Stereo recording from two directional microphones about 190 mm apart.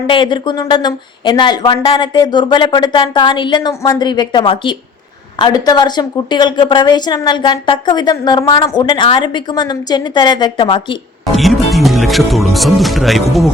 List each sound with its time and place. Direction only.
0.1 s a woman's voice: 25° left (ahead or behind)
11.3 s speech: centre (ahead or behind)